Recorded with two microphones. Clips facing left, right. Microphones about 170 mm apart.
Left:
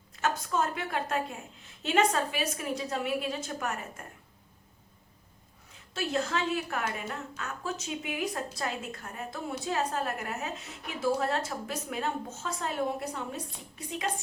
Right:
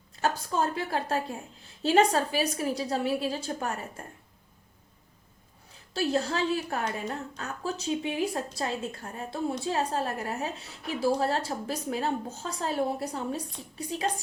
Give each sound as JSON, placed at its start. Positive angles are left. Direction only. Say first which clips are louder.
{"t": 0.2, "sound": "a woman's voice", "louder": "right 2 dB", "side_deg": -30}
{"t": 5.9, "sound": "a woman's voice", "louder": "right 3 dB", "side_deg": -35}